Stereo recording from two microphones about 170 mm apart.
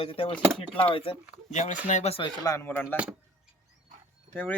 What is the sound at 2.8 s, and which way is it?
Speech, 5° right (ahead or behind).